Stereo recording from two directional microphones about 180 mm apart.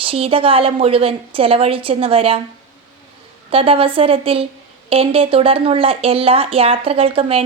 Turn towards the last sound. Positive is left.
turn(degrees=-30)  # may be behind; listen again after turning